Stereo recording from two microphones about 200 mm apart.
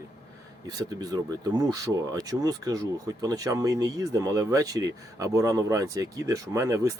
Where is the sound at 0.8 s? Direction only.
20° right (ahead or behind).